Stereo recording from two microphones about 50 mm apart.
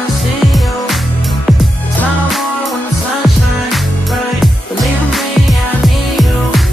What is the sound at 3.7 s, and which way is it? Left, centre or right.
Music, centre.